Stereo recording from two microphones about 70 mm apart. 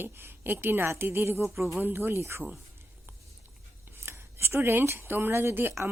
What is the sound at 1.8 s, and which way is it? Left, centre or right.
Speech, right.